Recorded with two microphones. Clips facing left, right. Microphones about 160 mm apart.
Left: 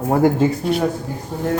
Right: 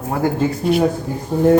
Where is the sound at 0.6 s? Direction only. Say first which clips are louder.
Right 3 dB; 5° right (ahead or behind).